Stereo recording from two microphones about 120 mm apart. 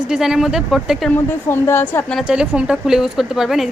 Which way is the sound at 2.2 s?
5° right (ahead or behind).